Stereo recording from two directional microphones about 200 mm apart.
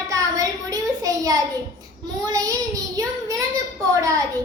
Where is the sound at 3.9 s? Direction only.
15° right (ahead or behind).